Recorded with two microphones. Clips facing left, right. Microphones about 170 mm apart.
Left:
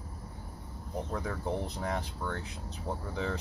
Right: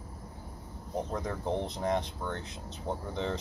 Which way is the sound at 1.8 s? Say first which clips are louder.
Right 4 dB; 25° right (ahead or behind).